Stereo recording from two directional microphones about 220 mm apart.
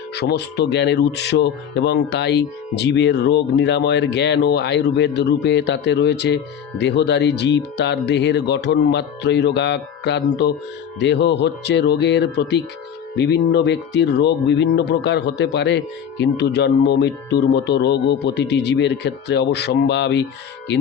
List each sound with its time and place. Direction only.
0.1 s speech: 50° left (ahead or behind)